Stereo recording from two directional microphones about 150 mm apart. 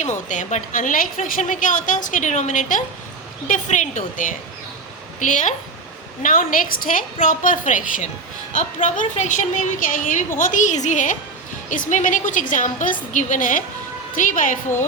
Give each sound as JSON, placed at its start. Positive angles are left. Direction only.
{"t": 0.3, "sound": "a woman's voice", "side_deg": 55}